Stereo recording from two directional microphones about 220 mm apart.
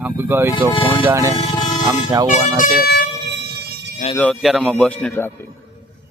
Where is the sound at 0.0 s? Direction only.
10° right (ahead or behind).